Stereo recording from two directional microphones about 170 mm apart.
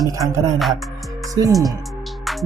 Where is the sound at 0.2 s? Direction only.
20° right (ahead or behind).